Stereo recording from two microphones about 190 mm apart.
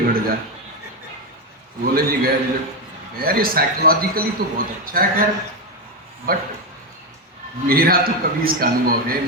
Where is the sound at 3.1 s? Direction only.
50° right (ahead or behind).